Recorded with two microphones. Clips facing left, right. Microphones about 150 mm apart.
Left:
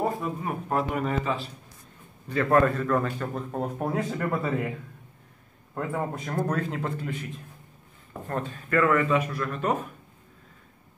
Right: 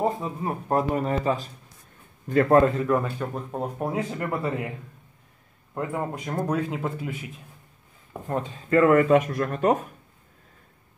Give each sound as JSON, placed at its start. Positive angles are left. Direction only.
{"t": 0.0, "sound": "speech", "side_deg": -25}
{"t": 2.5, "sound": "speech", "side_deg": -25}
{"t": 2.8, "sound": "speech", "side_deg": -10}
{"t": 5.8, "sound": "speech", "side_deg": -10}
{"t": 8.1, "sound": "speech", "side_deg": -15}
{"t": 8.9, "sound": "speech", "side_deg": -45}